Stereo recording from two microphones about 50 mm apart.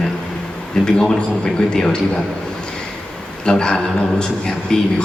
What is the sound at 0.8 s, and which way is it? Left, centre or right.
A man's voice, centre.